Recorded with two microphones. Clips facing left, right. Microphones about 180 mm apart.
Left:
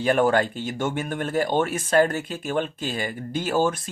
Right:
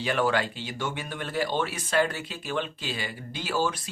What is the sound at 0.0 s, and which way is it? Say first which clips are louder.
Speech: left 6 dB; 50° left (ahead or behind).